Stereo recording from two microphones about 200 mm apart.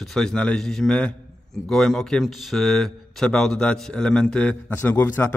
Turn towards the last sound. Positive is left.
turn(degrees=10)  # may be behind; listen again after turning